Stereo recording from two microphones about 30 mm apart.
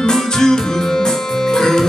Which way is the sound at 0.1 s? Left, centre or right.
Centre.